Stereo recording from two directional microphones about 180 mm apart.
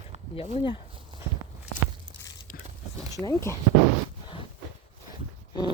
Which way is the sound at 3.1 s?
20° left (ahead or behind).